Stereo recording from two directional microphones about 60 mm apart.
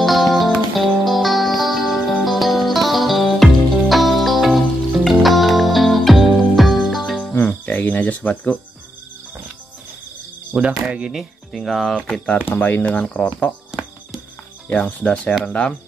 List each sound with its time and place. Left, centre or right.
0.0 s music: centre
7.4 s cricket: left
10.5 s speech: centre
11.5 s speech: centre
12.5 s speech: left
12.8 s speech: centre
13.7 s cricket: centre
14.7 s speech: centre